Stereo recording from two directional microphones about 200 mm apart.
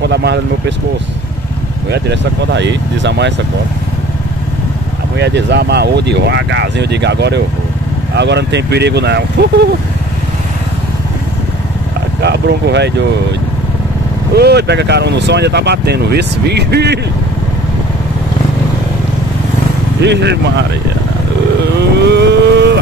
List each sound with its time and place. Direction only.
0.0 s speech: 55° right (ahead or behind)
1.9 s speech: 60° right (ahead or behind)
5.2 s speech: 55° right (ahead or behind)
12.2 s speech: 55° right (ahead or behind)
14.3 s speech: 55° right (ahead or behind)
20.0 s speech: 60° right (ahead or behind)
21.7 s vehicle: 60° right (ahead or behind)